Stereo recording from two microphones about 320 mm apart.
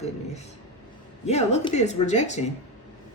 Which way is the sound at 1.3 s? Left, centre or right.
Centre.